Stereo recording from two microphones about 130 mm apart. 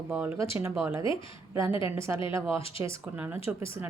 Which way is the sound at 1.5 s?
20° right (ahead or behind).